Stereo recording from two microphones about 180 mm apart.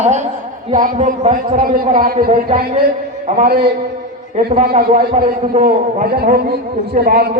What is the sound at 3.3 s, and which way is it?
A man's voice, 40° right (ahead or behind).